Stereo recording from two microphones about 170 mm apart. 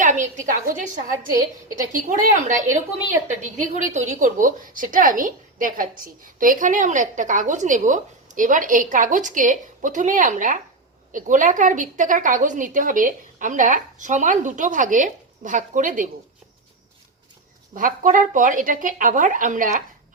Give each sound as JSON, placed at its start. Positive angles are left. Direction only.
{"t": 0.0, "sound": "a woman's voice", "side_deg": -45}
{"t": 1.9, "sound": "a woman's voice", "side_deg": -50}
{"t": 17.7, "sound": "a woman's voice", "side_deg": -50}